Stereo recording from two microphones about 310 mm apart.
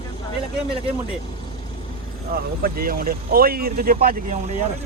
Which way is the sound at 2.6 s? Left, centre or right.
Right.